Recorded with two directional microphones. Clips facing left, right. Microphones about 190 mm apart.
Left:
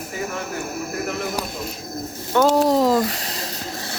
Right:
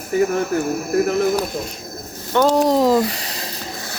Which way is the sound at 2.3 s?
5° left (ahead or behind).